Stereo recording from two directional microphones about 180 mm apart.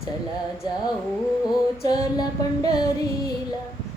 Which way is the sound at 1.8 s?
20° left (ahead or behind).